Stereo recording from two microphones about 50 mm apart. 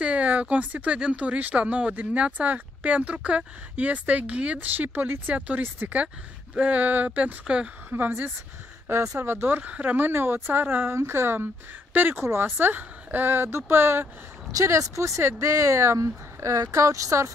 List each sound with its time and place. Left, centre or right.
0.0 s a sound: right
0.9 s speech: right
4.6 s speech: right
7.9 s speech: right
9.2 s speech: right
9.6 s speech: right
10.9 s speech: right
14.6 s speech: right